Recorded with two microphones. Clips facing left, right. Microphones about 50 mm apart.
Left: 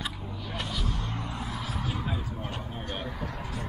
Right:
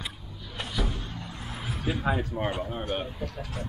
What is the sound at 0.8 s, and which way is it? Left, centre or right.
Vehicle, left.